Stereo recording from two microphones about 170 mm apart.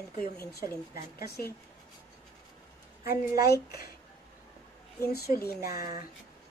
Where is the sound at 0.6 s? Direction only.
15° right (ahead or behind).